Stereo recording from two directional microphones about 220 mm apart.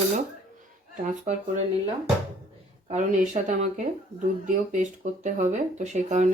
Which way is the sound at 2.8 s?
35° right (ahead or behind).